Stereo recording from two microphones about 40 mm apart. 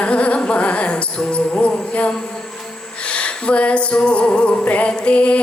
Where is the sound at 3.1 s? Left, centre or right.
Left.